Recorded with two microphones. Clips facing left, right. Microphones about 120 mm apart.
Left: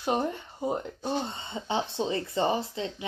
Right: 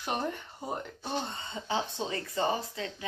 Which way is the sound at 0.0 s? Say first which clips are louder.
Left 5 dB; 20° left (ahead or behind).